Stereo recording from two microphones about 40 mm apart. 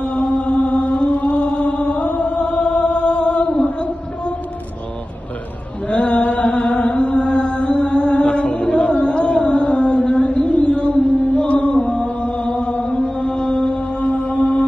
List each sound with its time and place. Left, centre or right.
0.0 s chant: left
5.9 s chant: left
11.7 s music: centre
12.2 s chant: left
12.8 s music: left